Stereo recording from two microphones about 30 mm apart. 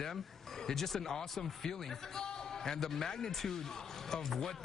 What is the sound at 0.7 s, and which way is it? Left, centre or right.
A man's voice, centre.